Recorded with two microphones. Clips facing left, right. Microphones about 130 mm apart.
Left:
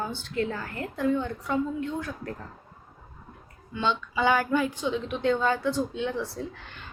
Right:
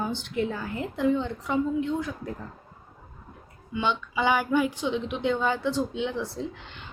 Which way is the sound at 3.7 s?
15° right (ahead or behind).